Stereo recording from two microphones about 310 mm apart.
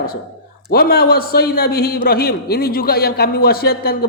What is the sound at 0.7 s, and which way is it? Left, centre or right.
A man's voice, left.